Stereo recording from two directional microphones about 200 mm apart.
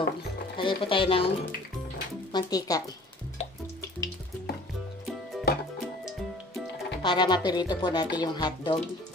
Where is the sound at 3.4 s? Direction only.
35° left (ahead or behind).